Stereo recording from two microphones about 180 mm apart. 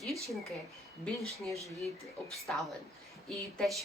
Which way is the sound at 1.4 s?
15° right (ahead or behind).